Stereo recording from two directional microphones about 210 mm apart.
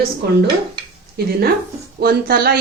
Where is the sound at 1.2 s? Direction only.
50° right (ahead or behind).